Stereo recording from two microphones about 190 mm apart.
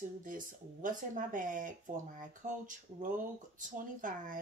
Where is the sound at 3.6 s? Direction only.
45° right (ahead or behind).